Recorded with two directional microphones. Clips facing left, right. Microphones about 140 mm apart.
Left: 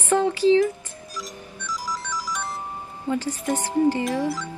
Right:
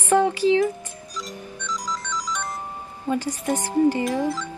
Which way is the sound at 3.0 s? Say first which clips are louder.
Right 1 dB; 15° right (ahead or behind).